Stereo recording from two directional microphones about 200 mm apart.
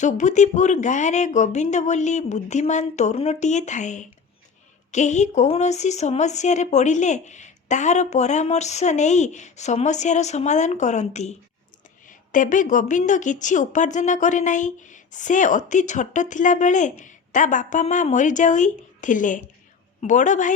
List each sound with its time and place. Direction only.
0.0 s a woman's voice: 35° left (ahead or behind)